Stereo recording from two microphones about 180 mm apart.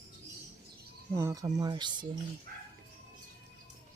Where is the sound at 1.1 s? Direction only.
20° right (ahead or behind).